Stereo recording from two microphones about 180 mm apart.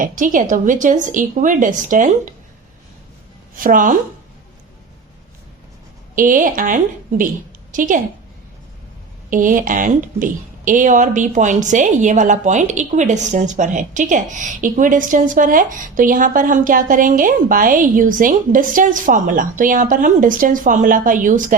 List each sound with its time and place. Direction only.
0.0 s a woman's voice: 45° right (ahead or behind)
3.6 s a woman's voice: 50° right (ahead or behind)
6.1 s a woman's voice: 50° right (ahead or behind)
9.3 s a woman's voice: 45° right (ahead or behind)